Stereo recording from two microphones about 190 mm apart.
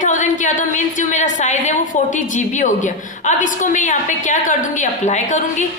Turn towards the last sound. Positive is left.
turn(degrees=40)  # may be behind; listen again after turning